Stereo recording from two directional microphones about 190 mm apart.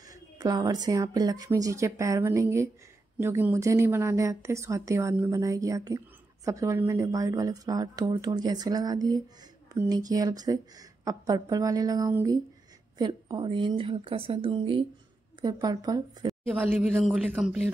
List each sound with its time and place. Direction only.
0.0 s a woman's voice: 20° right (ahead or behind); by 17.6 s centre (ahead or behind)